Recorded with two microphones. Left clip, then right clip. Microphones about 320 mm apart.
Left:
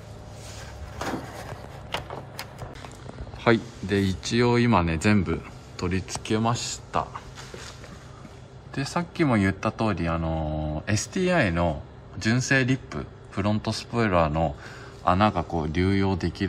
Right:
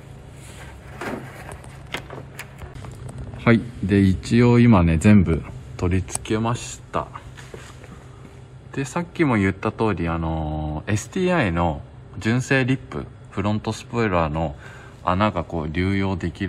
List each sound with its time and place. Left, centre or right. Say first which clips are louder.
3.3 s a man's voice: right 2 dB; centre
8.7 s a man's voice: right 3 dB; centre